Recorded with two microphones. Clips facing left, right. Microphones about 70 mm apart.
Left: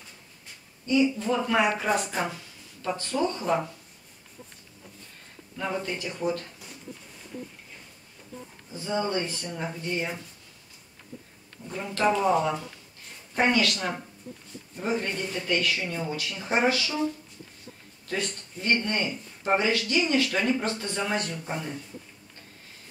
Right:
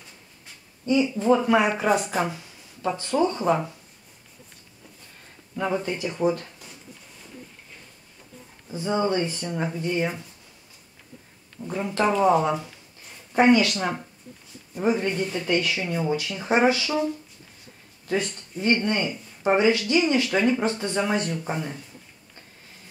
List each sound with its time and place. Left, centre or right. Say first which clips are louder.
1.1 s speech: right 6 dB; right
1.9 s a woman's voice: right 4 dB; centre
2.9 s speech: right 4 dB; centre
5.6 s speech: right 5 dB; centre
8.7 s speech: right 4 dB; right
11.7 s speech: right 2 dB; right
15.0 s speech: right 4 dB; centre
18.0 s speech: right 5 dB; centre